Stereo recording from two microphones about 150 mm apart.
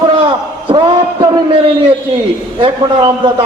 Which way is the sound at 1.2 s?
30° right (ahead or behind).